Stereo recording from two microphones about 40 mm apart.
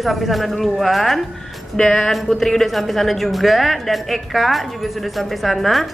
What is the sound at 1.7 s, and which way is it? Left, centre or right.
Speech, centre.